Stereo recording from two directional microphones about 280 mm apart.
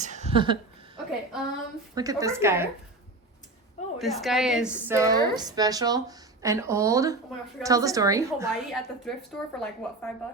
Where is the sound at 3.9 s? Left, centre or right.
Centre.